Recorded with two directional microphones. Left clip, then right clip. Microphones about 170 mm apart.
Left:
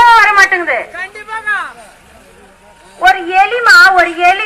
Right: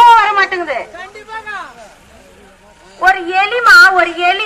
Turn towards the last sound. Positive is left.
turn(degrees=35)  # may be behind; listen again after turning